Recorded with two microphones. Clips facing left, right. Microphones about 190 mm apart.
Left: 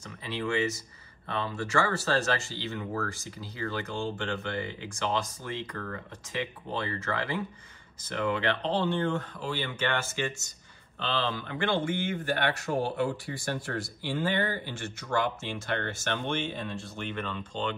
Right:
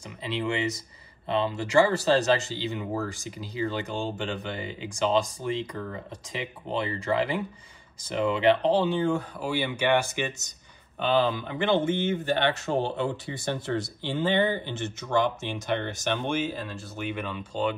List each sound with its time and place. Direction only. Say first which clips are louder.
0.2 s speech: right 1 dB; 20° right (ahead or behind)
8.7 s speech: right 4 dB; 5° right (ahead or behind)